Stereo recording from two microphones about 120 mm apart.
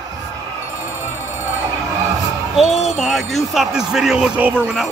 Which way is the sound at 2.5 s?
Centre (ahead or behind).